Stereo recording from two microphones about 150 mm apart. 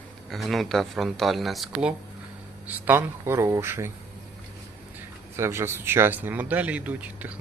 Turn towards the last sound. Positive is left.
turn(degrees=-10)  # may be behind; listen again after turning